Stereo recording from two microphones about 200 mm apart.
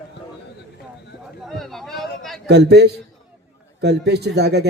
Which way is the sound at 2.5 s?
55° right (ahead or behind).